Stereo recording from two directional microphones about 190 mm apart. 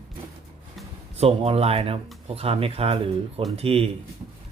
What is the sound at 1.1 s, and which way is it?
Speech, 30° right (ahead or behind).